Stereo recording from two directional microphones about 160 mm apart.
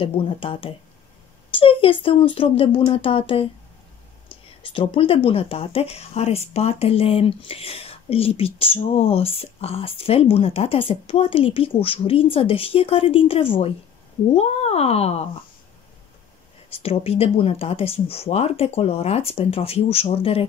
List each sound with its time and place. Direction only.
0.0 s speech: 35° left (ahead or behind)
16.7 s speech: 35° left (ahead or behind)